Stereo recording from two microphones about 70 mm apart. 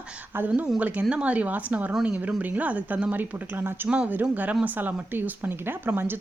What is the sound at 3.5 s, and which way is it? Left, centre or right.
A woman's voice, right.